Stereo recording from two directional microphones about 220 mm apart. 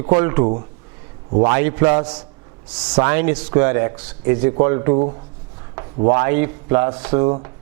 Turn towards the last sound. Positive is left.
turn(degrees=-20)  # may be behind; listen again after turning